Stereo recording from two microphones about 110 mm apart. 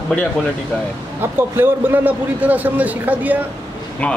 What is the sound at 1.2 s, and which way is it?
A man's voice, 20° right (ahead or behind).